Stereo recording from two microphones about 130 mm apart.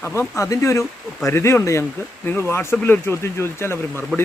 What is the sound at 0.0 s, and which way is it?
Speech, 20° left (ahead or behind).